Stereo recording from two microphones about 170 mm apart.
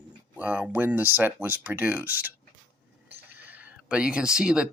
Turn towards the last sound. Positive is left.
turn(degrees=-5)  # may be behind; listen again after turning